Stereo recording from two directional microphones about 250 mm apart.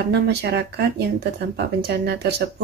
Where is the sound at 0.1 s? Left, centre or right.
Right.